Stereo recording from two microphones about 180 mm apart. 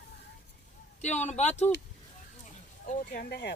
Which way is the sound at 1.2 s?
40° left (ahead or behind).